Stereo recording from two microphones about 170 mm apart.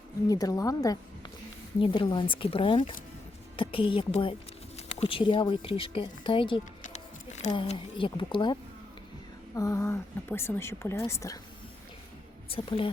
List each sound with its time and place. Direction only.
0.3 s speech: 20° left (ahead or behind)
6.8 s a sound: 40° left (ahead or behind)
7.5 s speech: 30° left (ahead or behind)
9.6 s a woman's voice: 15° left (ahead or behind)
12.5 s speech: 30° left (ahead or behind)